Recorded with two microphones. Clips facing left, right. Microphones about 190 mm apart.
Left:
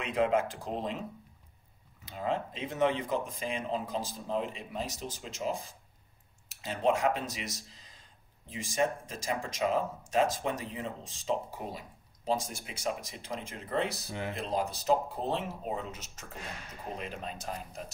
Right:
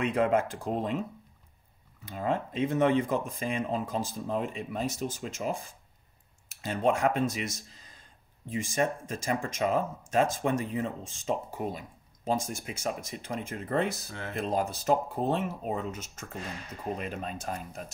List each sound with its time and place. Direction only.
0.0 s speech: 50° right (ahead or behind)
2.0 s speech: 50° right (ahead or behind)